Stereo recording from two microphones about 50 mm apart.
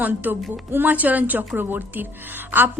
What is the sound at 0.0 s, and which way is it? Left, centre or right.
Speech, right.